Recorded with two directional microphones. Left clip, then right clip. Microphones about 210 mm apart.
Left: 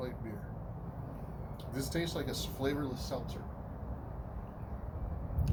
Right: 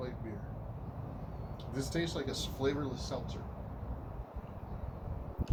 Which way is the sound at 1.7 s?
Centre (ahead or behind).